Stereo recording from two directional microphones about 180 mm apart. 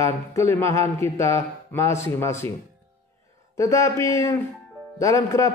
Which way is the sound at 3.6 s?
15° left (ahead or behind).